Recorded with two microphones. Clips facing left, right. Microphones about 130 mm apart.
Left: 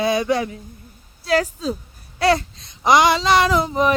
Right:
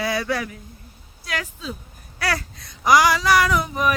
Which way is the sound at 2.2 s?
25° left (ahead or behind).